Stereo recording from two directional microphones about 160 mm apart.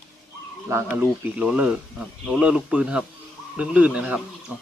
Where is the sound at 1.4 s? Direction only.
5° right (ahead or behind).